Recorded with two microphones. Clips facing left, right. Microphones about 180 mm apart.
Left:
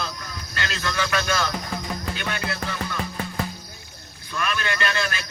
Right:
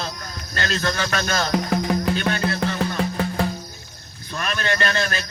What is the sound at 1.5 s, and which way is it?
Music, 70° right (ahead or behind).